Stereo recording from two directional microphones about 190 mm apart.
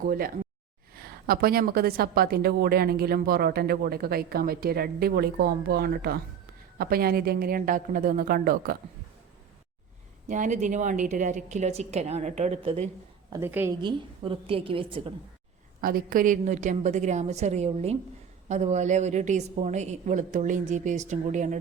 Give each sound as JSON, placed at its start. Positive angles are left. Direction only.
{"t": 0.0, "sound": "a woman's voice", "side_deg": -50}
{"t": 10.2, "sound": "a woman's voice", "side_deg": -40}
{"t": 13.3, "sound": "a woman's voice", "side_deg": -10}
{"t": 13.8, "sound": "a woman's voice", "side_deg": -25}
{"t": 15.8, "sound": "a woman's voice", "side_deg": -50}